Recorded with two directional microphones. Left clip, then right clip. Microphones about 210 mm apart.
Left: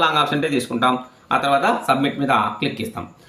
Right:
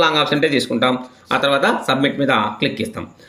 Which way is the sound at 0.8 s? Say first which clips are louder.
Right 1 dB; 15° right (ahead or behind).